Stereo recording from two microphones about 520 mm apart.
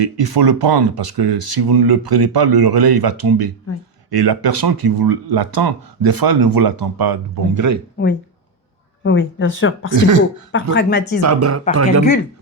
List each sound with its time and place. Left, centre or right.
0.0 s speech: right
9.0 s speech: left
9.9 s speech: right
10.5 s speech: centre
11.2 s speech: right